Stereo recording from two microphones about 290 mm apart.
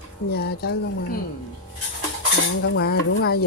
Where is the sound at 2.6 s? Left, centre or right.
Left.